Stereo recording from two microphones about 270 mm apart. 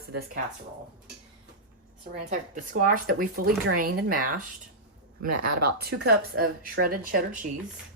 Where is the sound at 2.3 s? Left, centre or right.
Right.